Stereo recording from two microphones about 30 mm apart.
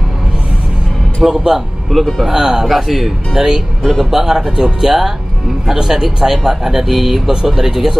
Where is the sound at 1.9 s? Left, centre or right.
Centre.